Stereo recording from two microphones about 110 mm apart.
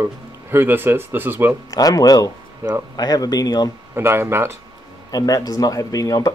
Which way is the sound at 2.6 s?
25° right (ahead or behind).